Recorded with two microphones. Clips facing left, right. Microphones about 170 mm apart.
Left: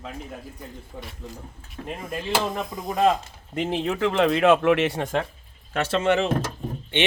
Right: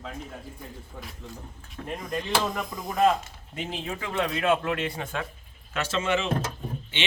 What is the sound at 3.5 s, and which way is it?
Speech, 65° left (ahead or behind).